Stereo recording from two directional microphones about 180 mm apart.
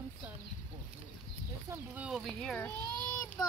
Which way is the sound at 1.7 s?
5° right (ahead or behind).